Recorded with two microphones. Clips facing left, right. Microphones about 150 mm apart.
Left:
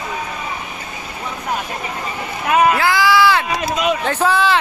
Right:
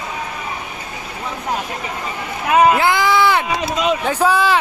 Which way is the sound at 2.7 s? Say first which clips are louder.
Even; 20° right (ahead or behind).